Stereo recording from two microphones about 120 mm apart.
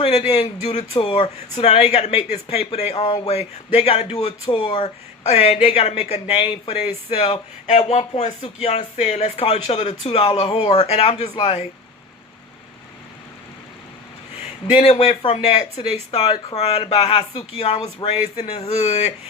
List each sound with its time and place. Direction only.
0.0 s speech: 60° left (ahead or behind)
4.4 s speech: 45° left (ahead or behind)
4.7 s speech: 65° left (ahead or behind)
14.7 s speech: 60° left (ahead or behind)
16.2 s speech: 40° left (ahead or behind)
16.6 s speech: 55° left (ahead or behind)